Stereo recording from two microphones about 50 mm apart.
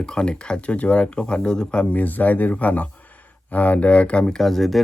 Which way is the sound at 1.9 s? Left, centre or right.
Left.